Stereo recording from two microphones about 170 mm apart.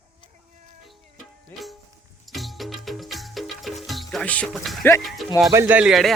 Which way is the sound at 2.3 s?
Centre (ahead or behind).